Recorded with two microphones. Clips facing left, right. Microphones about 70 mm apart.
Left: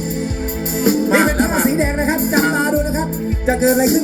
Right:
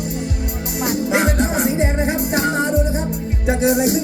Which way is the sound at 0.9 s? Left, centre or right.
Left.